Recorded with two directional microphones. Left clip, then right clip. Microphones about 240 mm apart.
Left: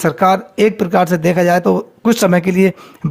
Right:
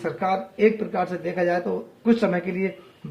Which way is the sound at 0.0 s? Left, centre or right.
Left.